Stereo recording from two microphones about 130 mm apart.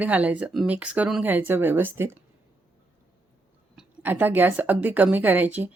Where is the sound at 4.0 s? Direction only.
15° right (ahead or behind).